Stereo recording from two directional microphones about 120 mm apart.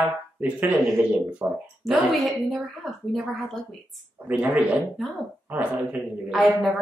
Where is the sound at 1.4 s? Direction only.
20° right (ahead or behind).